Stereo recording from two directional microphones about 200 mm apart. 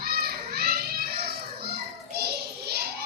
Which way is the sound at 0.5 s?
50° right (ahead or behind).